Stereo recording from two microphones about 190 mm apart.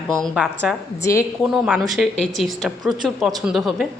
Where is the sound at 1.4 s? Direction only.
5° right (ahead or behind).